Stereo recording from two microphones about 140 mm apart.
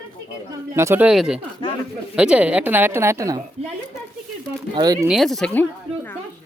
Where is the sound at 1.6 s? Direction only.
35° left (ahead or behind).